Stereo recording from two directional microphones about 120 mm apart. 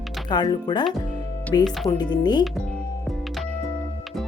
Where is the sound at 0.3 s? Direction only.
35° left (ahead or behind).